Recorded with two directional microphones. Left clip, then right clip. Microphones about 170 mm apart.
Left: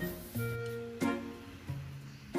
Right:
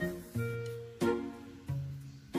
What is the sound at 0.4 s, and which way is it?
Music, centre (ahead or behind).